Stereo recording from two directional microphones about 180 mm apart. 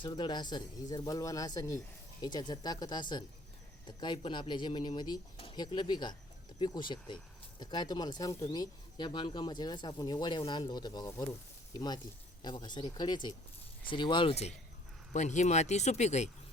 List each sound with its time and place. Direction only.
0.0 s speech: 25° left (ahead or behind)
12.4 s speech: 25° left (ahead or behind)